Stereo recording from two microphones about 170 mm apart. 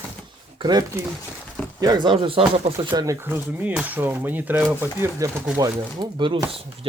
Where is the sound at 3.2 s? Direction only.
10° right (ahead or behind).